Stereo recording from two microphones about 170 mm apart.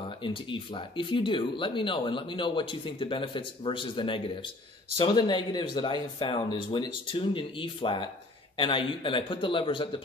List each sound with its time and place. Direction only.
0.2 s speech: 30° left (ahead or behind)